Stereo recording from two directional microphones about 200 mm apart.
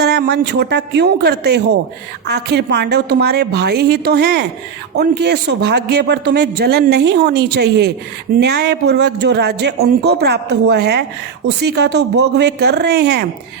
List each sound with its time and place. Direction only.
0.0 s a man's voice: 55° right (ahead or behind)